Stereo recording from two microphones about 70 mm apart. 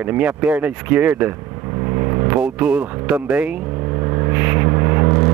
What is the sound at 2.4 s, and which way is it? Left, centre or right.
Speech, centre.